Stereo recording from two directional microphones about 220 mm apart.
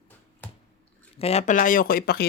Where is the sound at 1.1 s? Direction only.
30° left (ahead or behind); by 2.3 s 45° left (ahead or behind).